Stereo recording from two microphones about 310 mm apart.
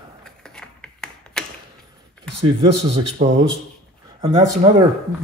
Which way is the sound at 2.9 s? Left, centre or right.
Right.